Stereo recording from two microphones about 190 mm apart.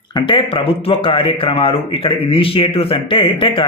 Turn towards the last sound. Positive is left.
turn(degrees=25)  # may be behind; listen again after turning